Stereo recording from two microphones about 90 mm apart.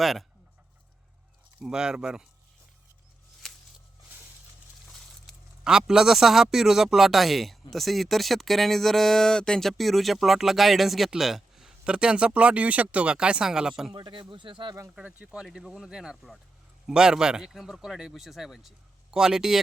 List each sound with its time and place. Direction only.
0.0 s speech: centre (ahead or behind)
1.6 s speech: 10° right (ahead or behind)
5.6 s speech: 10° right (ahead or behind)
13.9 s speech: 60° right (ahead or behind)
14.9 s speech: 10° right (ahead or behind)
15.4 s speech: centre (ahead or behind)